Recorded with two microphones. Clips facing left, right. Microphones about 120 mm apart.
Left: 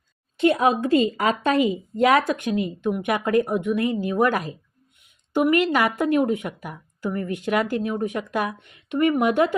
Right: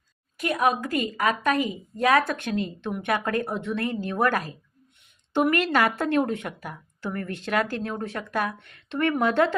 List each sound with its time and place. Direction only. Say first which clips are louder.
0.3 s a woman's voice: left 5 dB; 25° left (ahead or behind)